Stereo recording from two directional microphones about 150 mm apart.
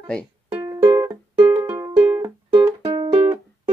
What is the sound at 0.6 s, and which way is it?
Music, 25° right (ahead or behind).